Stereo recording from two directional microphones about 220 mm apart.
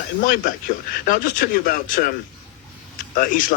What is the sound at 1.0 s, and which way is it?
A man's voice, 40° left (ahead or behind).